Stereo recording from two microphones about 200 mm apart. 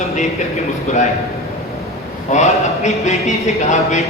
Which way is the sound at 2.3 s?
35° left (ahead or behind).